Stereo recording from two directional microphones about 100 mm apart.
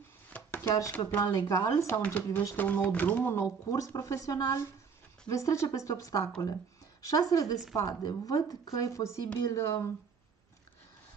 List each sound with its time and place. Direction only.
0.6 s speech: 35° left (ahead or behind)
2.0 s speech: 15° left (ahead or behind)
3.6 s speech: 35° left (ahead or behind)